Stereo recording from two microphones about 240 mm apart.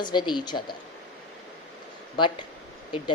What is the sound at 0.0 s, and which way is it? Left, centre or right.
Speech, centre.